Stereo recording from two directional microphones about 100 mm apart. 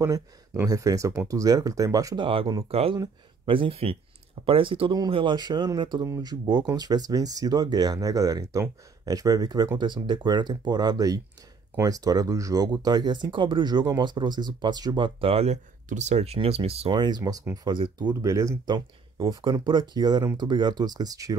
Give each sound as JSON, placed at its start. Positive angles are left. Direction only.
{"t": 0.7, "sound": "speech", "side_deg": -35}
{"t": 2.1, "sound": "speech", "side_deg": -55}
{"t": 2.7, "sound": "speech", "side_deg": -80}
{"t": 3.4, "sound": "speech", "side_deg": -60}
{"t": 4.5, "sound": "speech", "side_deg": -65}
{"t": 5.1, "sound": "speech", "side_deg": -50}
{"t": 16.9, "sound": "speech", "side_deg": -50}
{"t": 17.2, "sound": "speech", "side_deg": -35}
{"t": 17.6, "sound": "speech", "side_deg": -50}
{"t": 18.2, "sound": "speech", "side_deg": -30}
{"t": 18.7, "sound": "speech", "side_deg": -50}